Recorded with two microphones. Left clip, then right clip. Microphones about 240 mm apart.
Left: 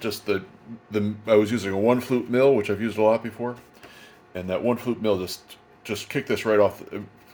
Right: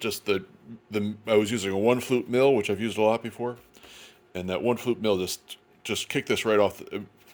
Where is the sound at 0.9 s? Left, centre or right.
Right.